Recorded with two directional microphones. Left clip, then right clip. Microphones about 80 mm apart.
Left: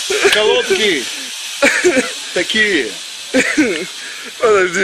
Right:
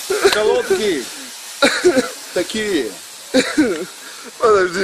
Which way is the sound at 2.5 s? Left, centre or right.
Right.